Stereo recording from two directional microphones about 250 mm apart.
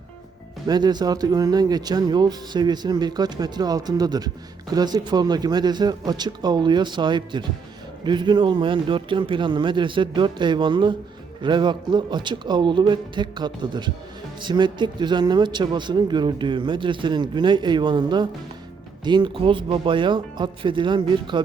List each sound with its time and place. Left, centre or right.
0.7 s a man's voice: centre